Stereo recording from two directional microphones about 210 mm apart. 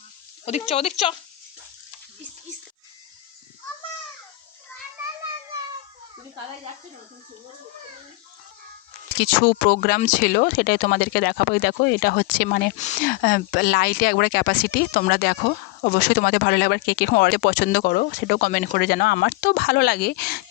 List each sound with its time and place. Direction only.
0.7 s speech: 30° left (ahead or behind)
9.1 s speech: 45° left (ahead or behind)